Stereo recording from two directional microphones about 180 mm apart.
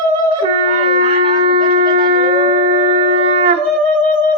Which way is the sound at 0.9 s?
30° right (ahead or behind).